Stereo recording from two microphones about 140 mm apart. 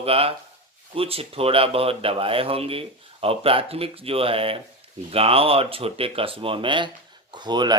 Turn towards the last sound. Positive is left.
turn(degrees=-30)  # may be behind; listen again after turning